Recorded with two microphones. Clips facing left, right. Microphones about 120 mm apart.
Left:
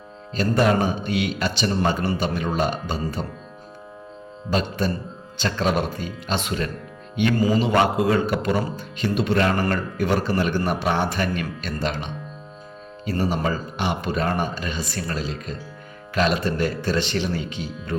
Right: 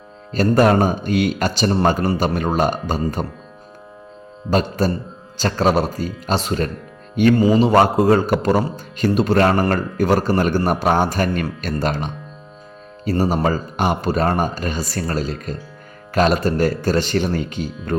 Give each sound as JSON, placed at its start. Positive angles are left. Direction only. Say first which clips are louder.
{"t": 0.3, "sound": "a man's voice", "louder": "right 5 dB", "side_deg": -45}
{"t": 4.4, "sound": "a man's voice", "louder": "right 5 dB", "side_deg": -40}
{"t": 7.3, "sound": "a man's voice", "louder": "right 2 dB", "side_deg": -25}
{"t": 7.6, "sound": "a man's voice", "louder": "right 5 dB", "side_deg": -40}